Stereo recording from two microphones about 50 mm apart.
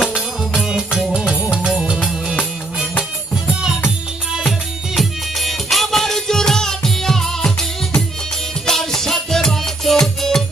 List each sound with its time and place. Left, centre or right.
0.5 s music: centre
3.5 s music: centre
4.9 s music: centre